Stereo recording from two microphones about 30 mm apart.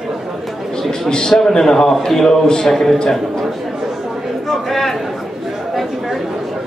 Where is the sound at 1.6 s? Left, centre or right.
Centre.